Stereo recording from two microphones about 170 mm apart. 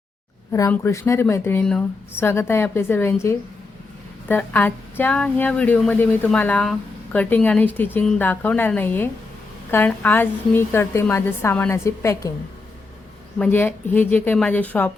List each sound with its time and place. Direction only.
0.7 s speech: 15° left (ahead or behind)
13.4 s speech: 10° left (ahead or behind)